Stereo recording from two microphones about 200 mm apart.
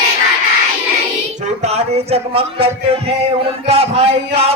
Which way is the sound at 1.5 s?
35° right (ahead or behind).